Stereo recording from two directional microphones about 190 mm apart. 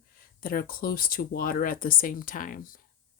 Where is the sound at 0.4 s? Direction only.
50° left (ahead or behind).